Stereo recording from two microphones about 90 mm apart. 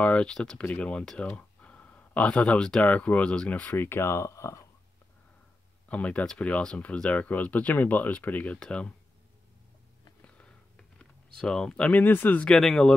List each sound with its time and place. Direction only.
0.0 s speech: 15° left (ahead or behind); by 4.6 s 30° left (ahead or behind)
5.9 s speech: 15° left (ahead or behind)
10.2 s a sound: 15° left (ahead or behind)
12.4 s speech: 5° left (ahead or behind)